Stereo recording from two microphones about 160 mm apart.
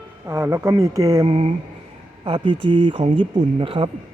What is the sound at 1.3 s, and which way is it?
Speech, 40° right (ahead or behind).